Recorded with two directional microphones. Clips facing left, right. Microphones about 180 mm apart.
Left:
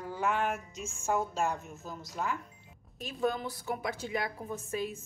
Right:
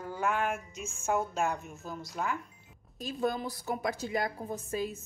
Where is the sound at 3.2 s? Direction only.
40° right (ahead or behind).